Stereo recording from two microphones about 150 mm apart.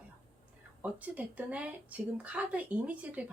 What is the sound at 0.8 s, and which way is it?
Speech, 10° right (ahead or behind).